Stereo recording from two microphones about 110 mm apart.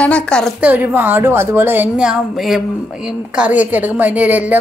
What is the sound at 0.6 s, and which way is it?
A woman's voice, 15° right (ahead or behind).